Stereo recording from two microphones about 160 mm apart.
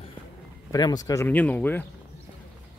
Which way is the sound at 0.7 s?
25° left (ahead or behind).